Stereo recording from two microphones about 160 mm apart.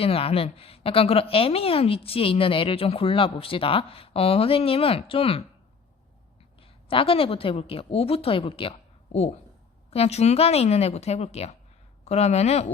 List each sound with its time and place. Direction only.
0.0 s a woman's voice: 35° left (ahead or behind)
6.6 s a woman's voice: 35° left (ahead or behind)